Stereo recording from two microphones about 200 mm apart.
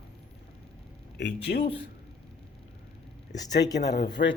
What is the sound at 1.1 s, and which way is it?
Speech, 55° left (ahead or behind).